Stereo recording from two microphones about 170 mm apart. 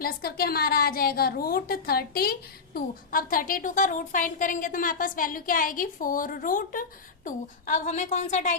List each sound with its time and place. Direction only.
0.0 s a woman's voice: 60° left (ahead or behind); by 8.5 s 45° left (ahead or behind)